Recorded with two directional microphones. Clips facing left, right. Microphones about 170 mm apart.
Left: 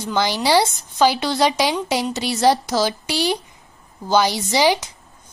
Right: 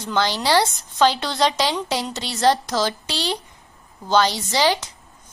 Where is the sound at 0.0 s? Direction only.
10° left (ahead or behind).